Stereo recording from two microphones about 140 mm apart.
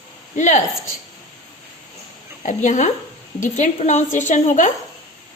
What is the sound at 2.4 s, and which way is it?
A woman's voice, 60° left (ahead or behind).